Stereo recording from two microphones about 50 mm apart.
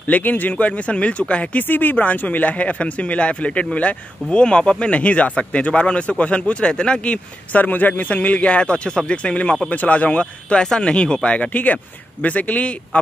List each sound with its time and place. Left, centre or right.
0.0 s speech: left
1.6 s speech: left; by 7.2 s centre
7.5 s speech: left